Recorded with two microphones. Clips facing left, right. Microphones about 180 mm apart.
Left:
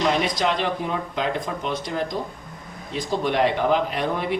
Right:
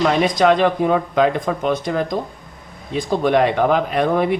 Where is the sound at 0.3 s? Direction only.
55° right (ahead or behind).